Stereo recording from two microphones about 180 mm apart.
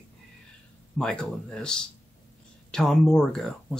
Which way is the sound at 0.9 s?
5° left (ahead or behind).